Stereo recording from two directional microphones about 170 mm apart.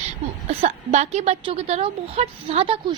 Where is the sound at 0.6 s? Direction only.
40° right (ahead or behind).